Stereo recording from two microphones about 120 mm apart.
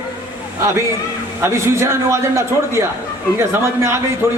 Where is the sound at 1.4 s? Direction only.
25° right (ahead or behind).